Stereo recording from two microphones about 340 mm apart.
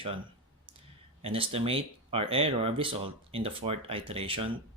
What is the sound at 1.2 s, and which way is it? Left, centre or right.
Speech, centre.